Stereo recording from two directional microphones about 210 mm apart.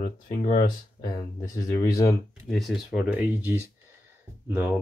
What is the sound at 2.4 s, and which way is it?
Speech, centre (ahead or behind).